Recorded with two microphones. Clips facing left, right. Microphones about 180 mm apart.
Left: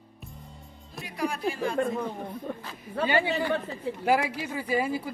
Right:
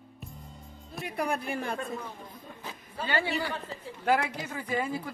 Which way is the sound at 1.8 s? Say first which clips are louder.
Left 9 dB; 60° left (ahead or behind).